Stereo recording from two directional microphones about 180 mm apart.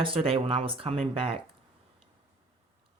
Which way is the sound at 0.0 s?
30° right (ahead or behind).